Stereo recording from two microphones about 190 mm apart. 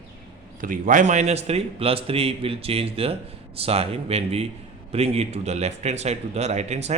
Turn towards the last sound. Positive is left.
turn(degrees=-35)  # may be behind; listen again after turning